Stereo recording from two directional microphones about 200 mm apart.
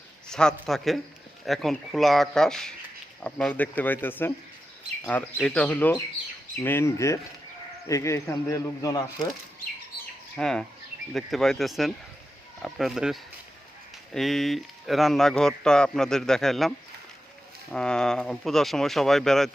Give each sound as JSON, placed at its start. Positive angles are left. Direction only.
{"t": 0.3, "sound": "a man's voice", "side_deg": 5}
{"t": 10.3, "sound": "a man's voice", "side_deg": 5}